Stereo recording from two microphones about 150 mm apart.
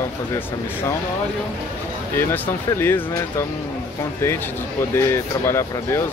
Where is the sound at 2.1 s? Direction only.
15° left (ahead or behind).